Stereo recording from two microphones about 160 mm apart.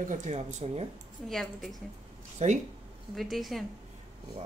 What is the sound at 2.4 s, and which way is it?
Speech, 45° right (ahead or behind).